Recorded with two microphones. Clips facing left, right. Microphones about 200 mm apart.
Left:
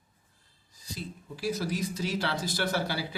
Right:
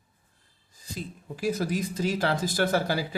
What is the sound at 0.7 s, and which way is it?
Speech, 50° right (ahead or behind).